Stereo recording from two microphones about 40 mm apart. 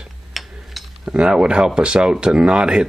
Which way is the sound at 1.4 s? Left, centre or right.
Right.